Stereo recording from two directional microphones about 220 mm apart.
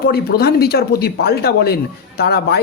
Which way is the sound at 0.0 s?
45° left (ahead or behind).